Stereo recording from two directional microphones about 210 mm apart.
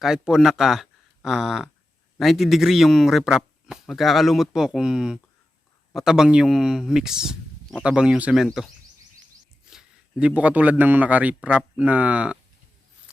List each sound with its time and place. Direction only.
0.0 s a man's voice: 5° right (ahead or behind)